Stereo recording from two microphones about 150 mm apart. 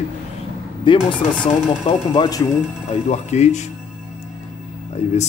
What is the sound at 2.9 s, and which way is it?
Speech, 45° left (ahead or behind).